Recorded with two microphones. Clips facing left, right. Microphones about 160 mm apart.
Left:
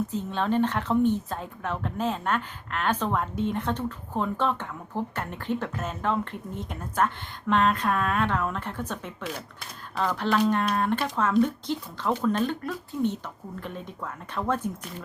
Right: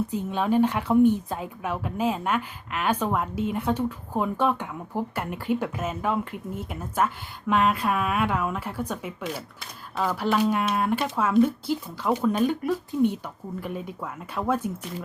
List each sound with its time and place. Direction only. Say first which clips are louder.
0.1 s speech: right 2 dB; 10° right (ahead or behind)